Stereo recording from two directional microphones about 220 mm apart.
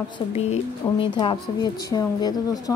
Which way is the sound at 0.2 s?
20° left (ahead or behind).